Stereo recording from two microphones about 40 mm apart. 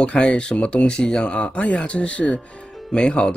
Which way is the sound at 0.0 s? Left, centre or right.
Left.